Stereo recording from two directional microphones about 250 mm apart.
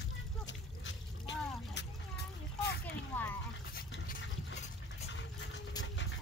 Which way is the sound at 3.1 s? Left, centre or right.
Centre.